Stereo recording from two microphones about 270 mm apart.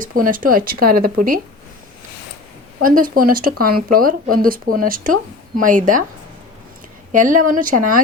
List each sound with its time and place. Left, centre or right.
0.0 s speech: right
2.8 s speech: right
7.1 s speech: right